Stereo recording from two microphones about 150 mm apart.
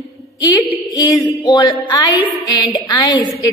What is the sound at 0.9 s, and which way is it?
A woman's voice, 25° left (ahead or behind).